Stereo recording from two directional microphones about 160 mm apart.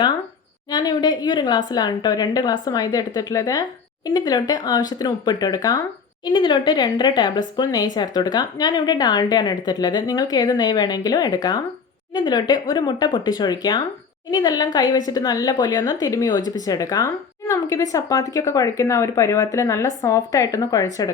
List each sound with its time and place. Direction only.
0.7 s speech: 25° left (ahead or behind)